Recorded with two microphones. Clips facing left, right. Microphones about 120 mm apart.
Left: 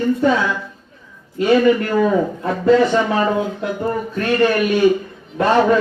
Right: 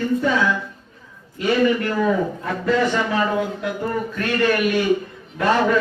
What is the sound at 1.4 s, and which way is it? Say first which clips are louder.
A man's voice: left 5 dB; 25° left (ahead or behind).